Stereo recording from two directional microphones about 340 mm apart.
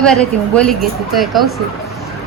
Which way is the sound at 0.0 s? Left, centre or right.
Centre.